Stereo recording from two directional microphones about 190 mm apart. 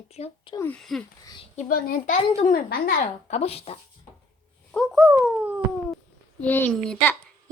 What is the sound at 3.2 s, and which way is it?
Speech, 35° left (ahead or behind).